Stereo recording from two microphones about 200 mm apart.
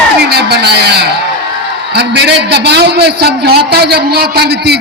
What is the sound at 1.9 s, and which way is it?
A man's voice, 55° right (ahead or behind).